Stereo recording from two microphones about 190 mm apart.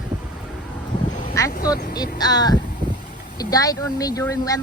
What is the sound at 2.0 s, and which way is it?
Speech, 20° left (ahead or behind).